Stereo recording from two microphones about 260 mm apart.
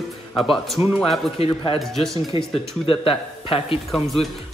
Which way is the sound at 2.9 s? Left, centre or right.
Left.